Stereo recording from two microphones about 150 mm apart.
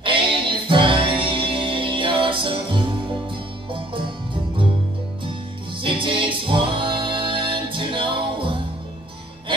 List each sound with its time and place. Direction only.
0.0 s music: 35° right (ahead or behind)
5.8 s music: 35° right (ahead or behind)